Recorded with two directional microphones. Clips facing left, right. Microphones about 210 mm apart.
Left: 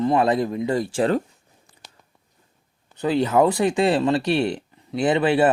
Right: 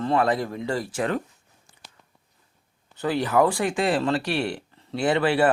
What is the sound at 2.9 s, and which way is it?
Speech, 20° left (ahead or behind).